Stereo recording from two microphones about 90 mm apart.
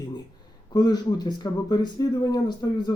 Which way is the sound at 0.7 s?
50° left (ahead or behind).